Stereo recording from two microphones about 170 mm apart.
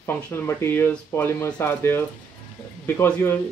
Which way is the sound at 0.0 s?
10° left (ahead or behind).